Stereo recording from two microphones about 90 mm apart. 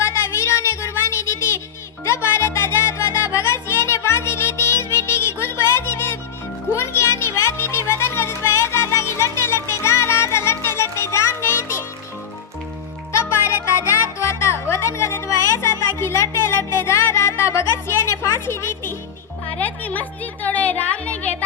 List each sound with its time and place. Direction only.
0.0 s a sound: 30° left (ahead or behind)
2.0 s music: 30° left (ahead or behind)
13.1 s music: 30° left (ahead or behind)